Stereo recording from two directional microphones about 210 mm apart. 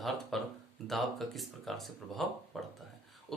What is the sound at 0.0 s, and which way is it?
Speech, centre (ahead or behind).